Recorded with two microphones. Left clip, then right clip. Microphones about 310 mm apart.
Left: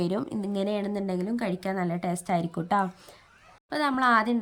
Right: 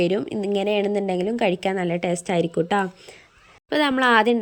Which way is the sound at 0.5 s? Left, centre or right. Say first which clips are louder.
Right 8 dB; centre.